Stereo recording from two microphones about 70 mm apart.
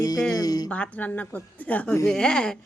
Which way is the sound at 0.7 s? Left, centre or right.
Left.